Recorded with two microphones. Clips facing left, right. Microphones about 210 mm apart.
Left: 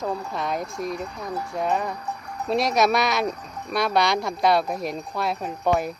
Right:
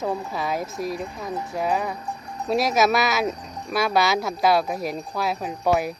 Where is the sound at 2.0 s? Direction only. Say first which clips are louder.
Even; 25° right (ahead or behind).